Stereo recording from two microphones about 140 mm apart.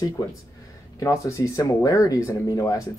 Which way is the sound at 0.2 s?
25° left (ahead or behind).